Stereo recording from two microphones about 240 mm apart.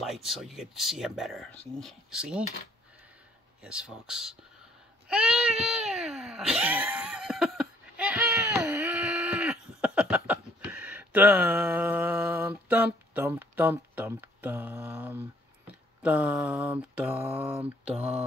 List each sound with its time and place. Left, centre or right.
0.0 s speech: centre
3.6 s speech: centre
5.0 s cat: centre
17.8 s speech: right